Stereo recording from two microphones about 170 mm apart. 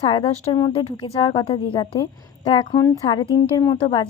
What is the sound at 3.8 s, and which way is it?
Speech, 35° left (ahead or behind).